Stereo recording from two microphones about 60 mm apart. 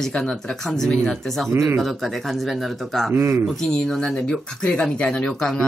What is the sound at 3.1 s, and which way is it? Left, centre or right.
Speech, right.